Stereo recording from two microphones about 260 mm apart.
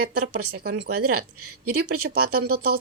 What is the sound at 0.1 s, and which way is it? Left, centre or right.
Speech, right.